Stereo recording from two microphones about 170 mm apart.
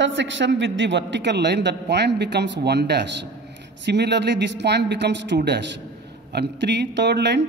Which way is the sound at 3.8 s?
90° right.